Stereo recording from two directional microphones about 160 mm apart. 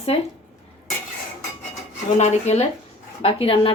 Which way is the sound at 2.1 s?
45° left (ahead or behind).